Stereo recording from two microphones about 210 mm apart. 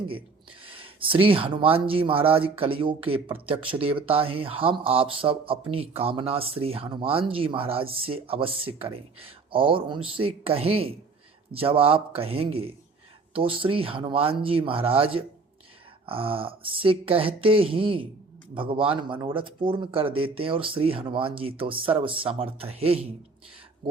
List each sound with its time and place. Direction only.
0.6 s speech: 25° right (ahead or behind)